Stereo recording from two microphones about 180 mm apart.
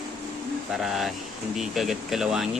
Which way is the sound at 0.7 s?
Centre (ahead or behind).